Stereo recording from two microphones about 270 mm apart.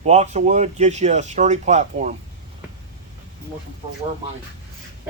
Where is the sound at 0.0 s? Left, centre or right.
Right.